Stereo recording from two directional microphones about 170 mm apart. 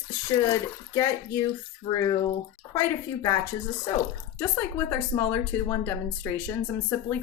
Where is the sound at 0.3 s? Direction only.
20° left (ahead or behind).